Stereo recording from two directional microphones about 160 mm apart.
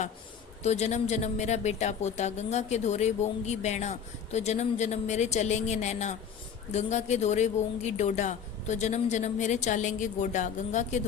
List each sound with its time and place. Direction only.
0.6 s speech: 45° left (ahead or behind)